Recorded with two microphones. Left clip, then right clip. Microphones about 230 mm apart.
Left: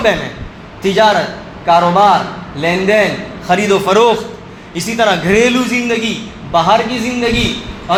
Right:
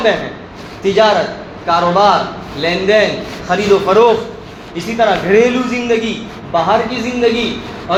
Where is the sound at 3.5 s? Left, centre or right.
Left.